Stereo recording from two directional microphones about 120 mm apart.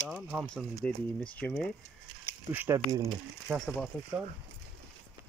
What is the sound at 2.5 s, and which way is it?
Speech, 15° right (ahead or behind).